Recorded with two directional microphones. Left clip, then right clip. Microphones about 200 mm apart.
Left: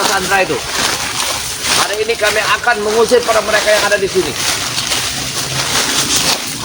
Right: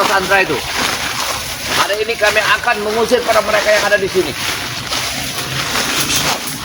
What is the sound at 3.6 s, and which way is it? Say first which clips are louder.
Speech: left 1 dB; 10° left (ahead or behind).